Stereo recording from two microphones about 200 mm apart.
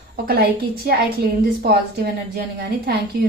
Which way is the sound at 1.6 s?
50° right (ahead or behind).